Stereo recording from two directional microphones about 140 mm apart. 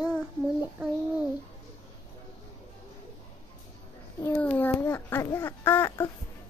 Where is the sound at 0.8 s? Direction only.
10° right (ahead or behind).